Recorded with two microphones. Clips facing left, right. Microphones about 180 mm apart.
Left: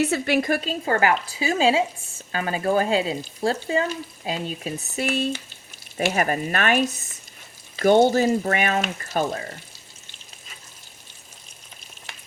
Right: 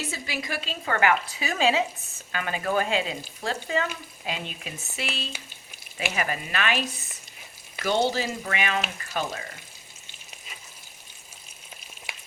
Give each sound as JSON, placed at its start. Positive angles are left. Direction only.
{"t": 0.0, "sound": "a woman's voice", "side_deg": 65}
{"t": 7.9, "sound": "a woman's voice", "side_deg": 50}